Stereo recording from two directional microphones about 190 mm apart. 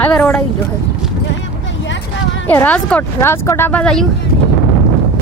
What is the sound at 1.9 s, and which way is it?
Vehicle, 75° left (ahead or behind).